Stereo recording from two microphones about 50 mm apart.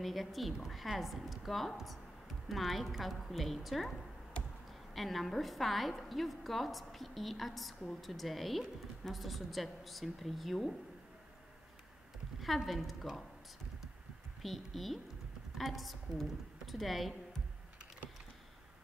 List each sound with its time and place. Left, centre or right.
0.0 s a woman's voice: centre
4.9 s a woman's voice: centre
12.4 s a woman's voice: centre
14.4 s a woman's voice: centre